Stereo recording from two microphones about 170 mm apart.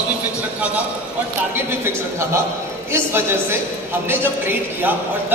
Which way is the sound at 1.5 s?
15° right (ahead or behind).